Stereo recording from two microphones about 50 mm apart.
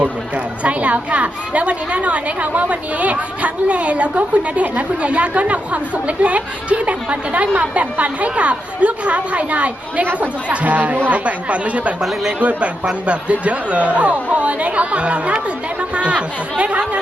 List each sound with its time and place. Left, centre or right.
0.6 s a woman's voice: right